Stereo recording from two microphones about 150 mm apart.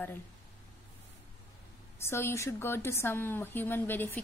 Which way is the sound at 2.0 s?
15° left (ahead or behind).